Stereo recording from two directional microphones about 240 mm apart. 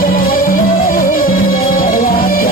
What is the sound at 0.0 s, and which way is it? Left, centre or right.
Music, left.